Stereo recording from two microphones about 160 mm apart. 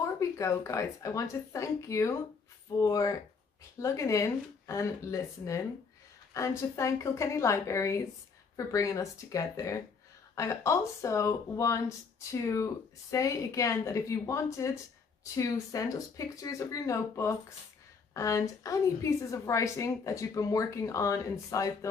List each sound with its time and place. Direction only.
0.0 s a woman's voice: 20° left (ahead or behind)
13.1 s a woman's voice: 20° left (ahead or behind)